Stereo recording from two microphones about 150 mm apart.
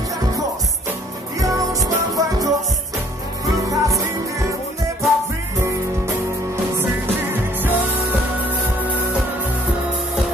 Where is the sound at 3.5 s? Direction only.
20° right (ahead or behind).